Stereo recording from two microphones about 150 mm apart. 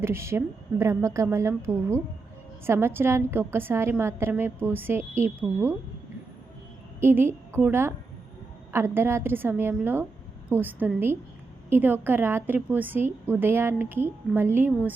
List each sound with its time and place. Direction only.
0.0 s a woman's voice: 15° right (ahead or behind)
7.0 s a woman's voice: 15° right (ahead or behind)